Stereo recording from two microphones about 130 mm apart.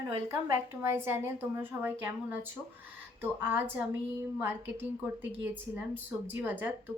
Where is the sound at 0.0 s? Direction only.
25° right (ahead or behind).